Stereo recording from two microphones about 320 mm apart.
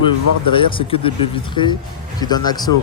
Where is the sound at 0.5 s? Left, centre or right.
Centre.